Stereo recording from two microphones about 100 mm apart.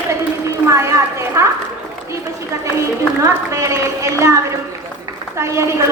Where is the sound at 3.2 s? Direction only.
30° right (ahead or behind).